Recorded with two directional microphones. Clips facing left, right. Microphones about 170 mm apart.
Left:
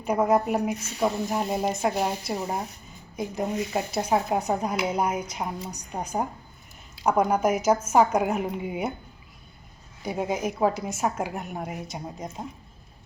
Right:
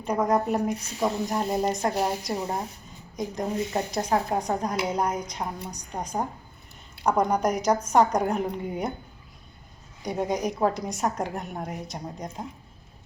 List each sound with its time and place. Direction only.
0.0 s a woman's voice: 5° left (ahead or behind)
10.0 s a woman's voice: 5° left (ahead or behind)